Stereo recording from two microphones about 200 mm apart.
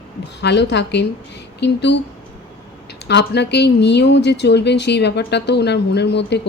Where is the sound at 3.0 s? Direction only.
60° left (ahead or behind).